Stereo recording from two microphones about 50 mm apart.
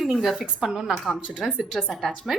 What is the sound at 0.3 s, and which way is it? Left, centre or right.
Speech, centre.